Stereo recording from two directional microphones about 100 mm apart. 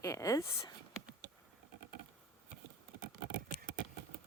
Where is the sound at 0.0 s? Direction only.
35° left (ahead or behind).